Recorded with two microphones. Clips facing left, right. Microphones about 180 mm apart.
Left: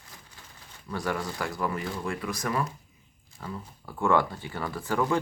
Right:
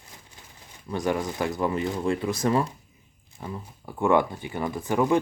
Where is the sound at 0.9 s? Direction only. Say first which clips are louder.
Right 5 dB; 20° right (ahead or behind).